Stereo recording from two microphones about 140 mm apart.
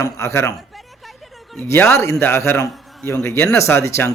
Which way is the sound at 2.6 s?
Centre (ahead or behind).